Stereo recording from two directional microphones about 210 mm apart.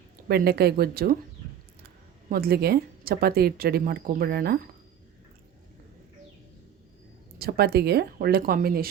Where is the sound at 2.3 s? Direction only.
45° right (ahead or behind).